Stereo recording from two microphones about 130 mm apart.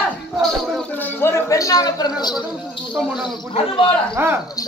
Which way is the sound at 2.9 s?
Centre (ahead or behind).